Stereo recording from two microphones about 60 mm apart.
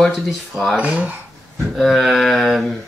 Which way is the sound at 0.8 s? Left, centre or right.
Right.